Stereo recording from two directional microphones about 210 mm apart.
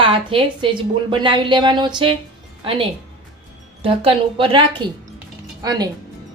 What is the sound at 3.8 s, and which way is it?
Speech, 25° right (ahead or behind).